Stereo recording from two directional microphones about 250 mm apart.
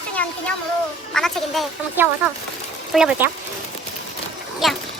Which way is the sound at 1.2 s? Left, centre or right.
Centre.